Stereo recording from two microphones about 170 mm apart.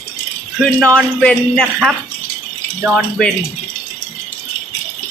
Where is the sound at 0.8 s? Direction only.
5° left (ahead or behind).